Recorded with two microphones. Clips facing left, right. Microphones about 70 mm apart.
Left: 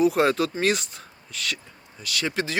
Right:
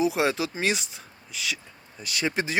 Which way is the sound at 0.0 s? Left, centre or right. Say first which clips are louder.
Left 4 dB; centre.